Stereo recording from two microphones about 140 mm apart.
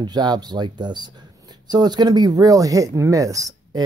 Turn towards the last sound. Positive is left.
turn(degrees=-25)  # may be behind; listen again after turning